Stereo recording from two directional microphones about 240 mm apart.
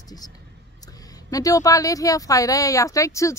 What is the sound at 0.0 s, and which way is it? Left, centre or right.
Speech, centre.